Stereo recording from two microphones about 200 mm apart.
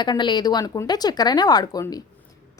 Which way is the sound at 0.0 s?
20° left (ahead or behind).